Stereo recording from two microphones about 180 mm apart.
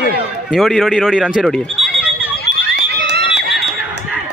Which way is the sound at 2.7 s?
70° right (ahead or behind).